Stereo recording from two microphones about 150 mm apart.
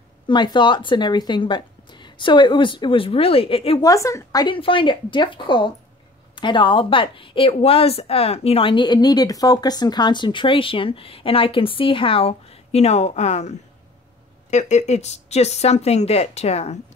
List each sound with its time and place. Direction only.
0.3 s speech: 30° left (ahead or behind)
3.8 s speech: 20° left (ahead or behind); by 16.8 s 45° left (ahead or behind)